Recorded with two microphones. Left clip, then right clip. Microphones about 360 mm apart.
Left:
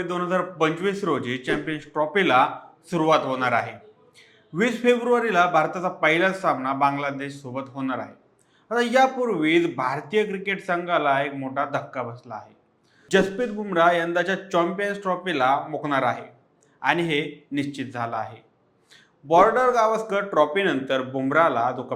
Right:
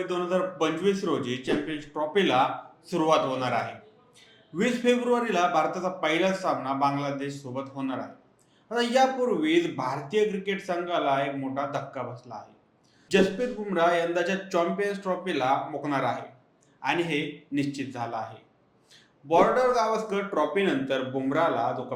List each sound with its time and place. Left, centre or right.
0.0 s a man's voice: left